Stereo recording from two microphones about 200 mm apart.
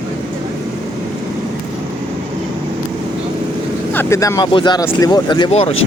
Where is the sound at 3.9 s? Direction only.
10° left (ahead or behind); by 5.8 s 30° left (ahead or behind).